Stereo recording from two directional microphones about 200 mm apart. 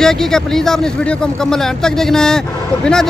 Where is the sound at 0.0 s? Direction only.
5° left (ahead or behind).